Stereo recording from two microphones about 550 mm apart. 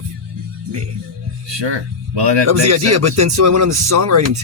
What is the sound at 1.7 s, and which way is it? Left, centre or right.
Speech, right.